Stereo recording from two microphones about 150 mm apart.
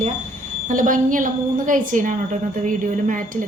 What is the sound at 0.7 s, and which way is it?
A woman's voice, 60° right (ahead or behind).